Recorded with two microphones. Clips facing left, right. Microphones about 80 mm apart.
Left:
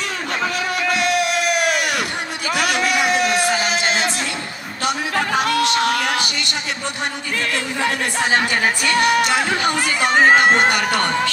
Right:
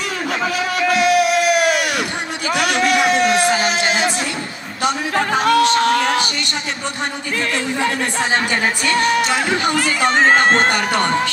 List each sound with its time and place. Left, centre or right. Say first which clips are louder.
0.4 s a sound: right 2 dB; centre
5.1 s music: right 5 dB; right
8.8 s music: even; right
9.8 s speech: even; centre